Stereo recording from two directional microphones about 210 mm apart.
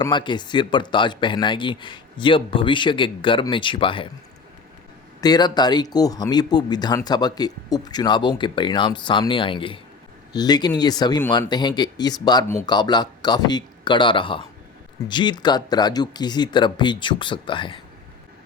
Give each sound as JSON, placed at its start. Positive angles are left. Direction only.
{"t": 0.0, "sound": "speech", "side_deg": 20}
{"t": 5.2, "sound": "speech", "side_deg": 20}